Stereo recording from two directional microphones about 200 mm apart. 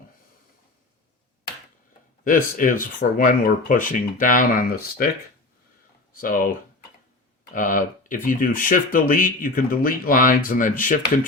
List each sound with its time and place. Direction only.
2.2 s speech: 45° left (ahead or behind)
6.1 s speech: 45° left (ahead or behind)